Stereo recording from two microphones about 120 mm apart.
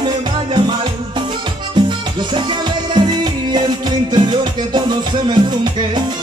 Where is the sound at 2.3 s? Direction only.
40° right (ahead or behind).